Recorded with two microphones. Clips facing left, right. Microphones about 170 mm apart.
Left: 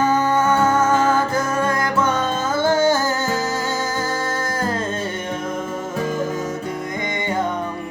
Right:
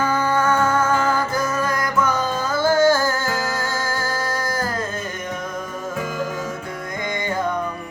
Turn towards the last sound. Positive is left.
turn(degrees=20)  # may be behind; listen again after turning